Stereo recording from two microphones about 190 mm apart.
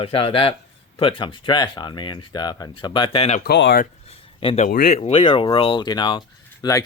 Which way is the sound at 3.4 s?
60° left (ahead or behind).